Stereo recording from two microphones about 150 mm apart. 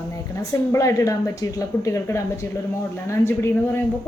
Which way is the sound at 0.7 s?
20° left (ahead or behind).